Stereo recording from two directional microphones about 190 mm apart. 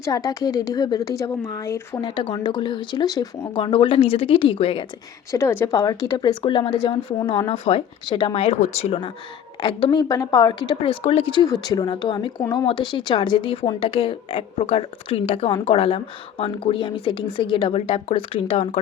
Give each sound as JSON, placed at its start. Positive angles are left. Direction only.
{"t": 0.0, "sound": "speech", "side_deg": 20}
{"t": 5.3, "sound": "speech", "side_deg": 15}